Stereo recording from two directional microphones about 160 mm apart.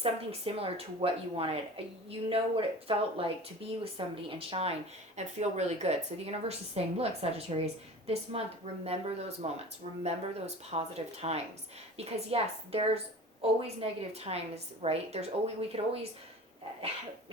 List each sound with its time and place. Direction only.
0.0 s speech: 35° right (ahead or behind)